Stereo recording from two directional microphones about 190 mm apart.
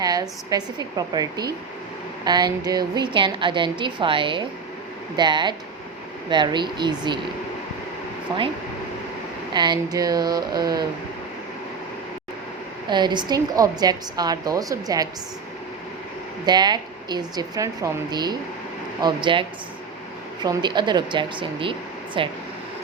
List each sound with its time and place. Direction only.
0.0 s a woman's voice: 20° right (ahead or behind)
8.3 s a woman's voice: 25° right (ahead or behind)
9.5 s a woman's voice: 20° right (ahead or behind)
12.9 s a woman's voice: 25° right (ahead or behind)
16.5 s a woman's voice: 20° right (ahead or behind)